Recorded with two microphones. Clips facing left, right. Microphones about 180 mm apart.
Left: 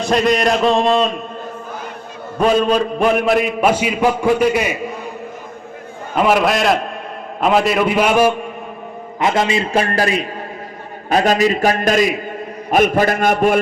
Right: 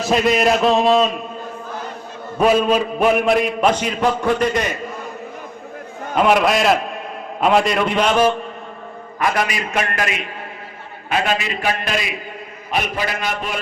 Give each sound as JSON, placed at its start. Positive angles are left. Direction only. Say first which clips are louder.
{"t": 0.0, "sound": "a man's voice", "louder": "left 1 dB", "side_deg": -5}
{"t": 2.4, "sound": "a man's voice", "louder": "left 1 dB", "side_deg": -5}
{"t": 6.1, "sound": "a man's voice", "louder": "left 1 dB", "side_deg": 0}
{"t": 9.2, "sound": "a man's voice", "louder": "left 4 dB", "side_deg": 25}